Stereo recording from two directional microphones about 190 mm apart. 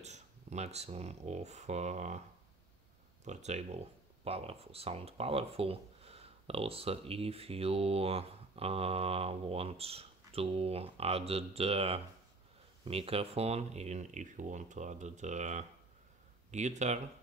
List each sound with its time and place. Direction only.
0.0 s speech: 35° right (ahead or behind)
3.3 s speech: 35° right (ahead or behind)